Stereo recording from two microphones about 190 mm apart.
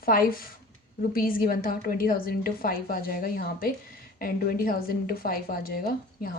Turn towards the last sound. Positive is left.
turn(degrees=50)  # may be behind; listen again after turning